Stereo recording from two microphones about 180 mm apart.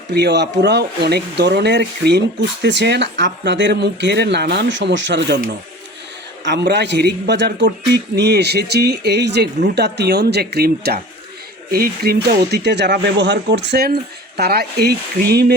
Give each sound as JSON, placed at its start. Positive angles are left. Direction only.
{"t": 0.1, "sound": "speech", "side_deg": -70}
{"t": 6.4, "sound": "speech", "side_deg": -70}